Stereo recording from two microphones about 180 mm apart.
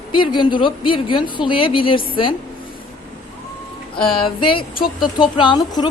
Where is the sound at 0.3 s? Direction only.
25° left (ahead or behind).